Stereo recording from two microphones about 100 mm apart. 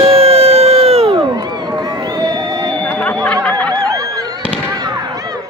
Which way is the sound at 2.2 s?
45° right (ahead or behind).